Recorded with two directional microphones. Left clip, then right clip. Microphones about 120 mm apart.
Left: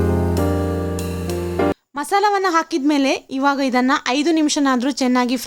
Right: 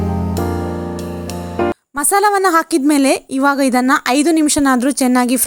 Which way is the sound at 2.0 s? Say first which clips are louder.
Right 4 dB; 50° right (ahead or behind).